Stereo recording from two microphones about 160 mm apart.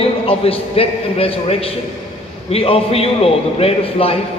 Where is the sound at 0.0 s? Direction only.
35° left (ahead or behind).